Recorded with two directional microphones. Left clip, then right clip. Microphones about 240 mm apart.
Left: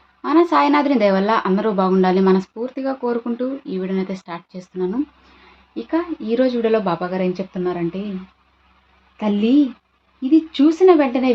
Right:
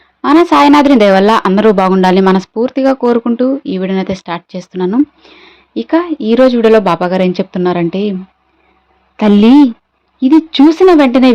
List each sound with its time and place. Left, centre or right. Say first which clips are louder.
0.2 s speech: right 8 dB; right
9.1 s a woman's voice: right 10 dB; right